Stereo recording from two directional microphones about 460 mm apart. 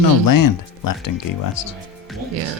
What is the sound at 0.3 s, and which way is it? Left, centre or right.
Speech, left.